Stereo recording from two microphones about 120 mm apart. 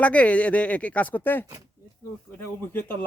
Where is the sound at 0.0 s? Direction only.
10° left (ahead or behind).